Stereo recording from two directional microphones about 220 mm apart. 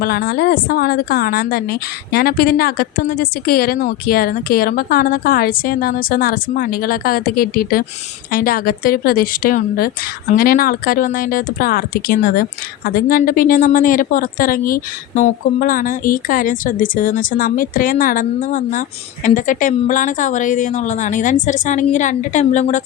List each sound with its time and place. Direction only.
0.0 s speech: 45° left (ahead or behind)